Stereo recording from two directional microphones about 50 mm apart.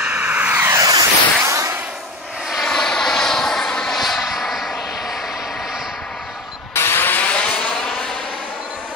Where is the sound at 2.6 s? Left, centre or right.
Centre.